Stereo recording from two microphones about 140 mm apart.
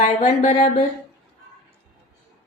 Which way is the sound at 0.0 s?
55° left (ahead or behind).